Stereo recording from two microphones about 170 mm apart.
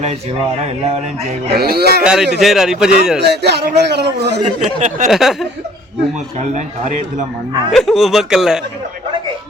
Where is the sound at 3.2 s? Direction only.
75° right (ahead or behind).